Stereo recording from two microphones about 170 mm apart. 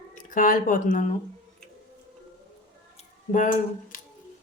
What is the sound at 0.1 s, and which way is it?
Speech, 50° left (ahead or behind).